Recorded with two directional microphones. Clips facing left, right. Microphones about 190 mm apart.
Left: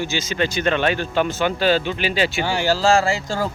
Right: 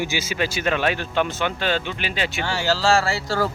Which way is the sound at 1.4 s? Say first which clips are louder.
Left 5 dB; 35° left (ahead or behind).